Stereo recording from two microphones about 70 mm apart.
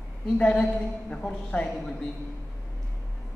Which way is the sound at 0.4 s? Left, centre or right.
Centre.